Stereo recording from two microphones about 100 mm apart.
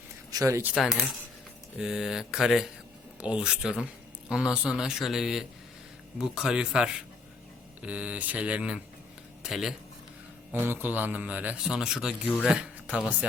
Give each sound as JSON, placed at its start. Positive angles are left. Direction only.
{"t": 0.3, "sound": "speech", "side_deg": -35}
{"t": 1.8, "sound": "a man's voice", "side_deg": -5}
{"t": 10.5, "sound": "a man's voice", "side_deg": -20}